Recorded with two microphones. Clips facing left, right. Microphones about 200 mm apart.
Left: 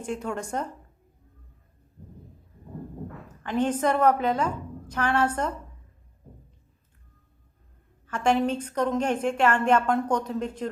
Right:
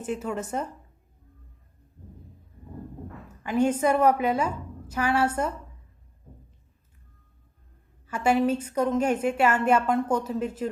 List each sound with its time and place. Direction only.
0.0 s speech: 5° right (ahead or behind)
3.4 s a woman's voice: 10° right (ahead or behind)
8.0 s a woman's voice: 10° right (ahead or behind)